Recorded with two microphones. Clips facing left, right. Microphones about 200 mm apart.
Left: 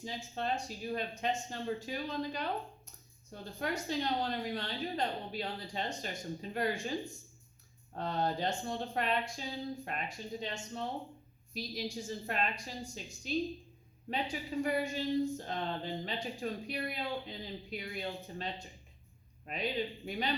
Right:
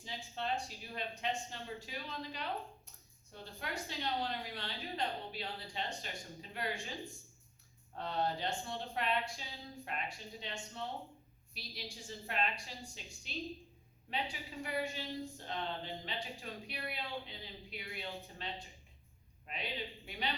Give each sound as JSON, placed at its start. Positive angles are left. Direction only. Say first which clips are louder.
{"t": 0.0, "sound": "speech", "louder": "left 4 dB", "side_deg": 45}
{"t": 7.9, "sound": "speech", "louder": "left 3 dB", "side_deg": 45}